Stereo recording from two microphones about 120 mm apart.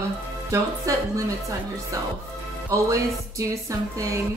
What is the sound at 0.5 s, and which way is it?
Music, 25° right (ahead or behind).